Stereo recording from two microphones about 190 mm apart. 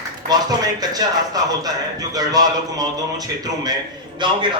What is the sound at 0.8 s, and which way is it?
A man's voice, 20° right (ahead or behind).